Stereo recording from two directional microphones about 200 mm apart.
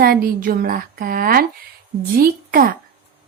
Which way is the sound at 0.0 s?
50° right (ahead or behind).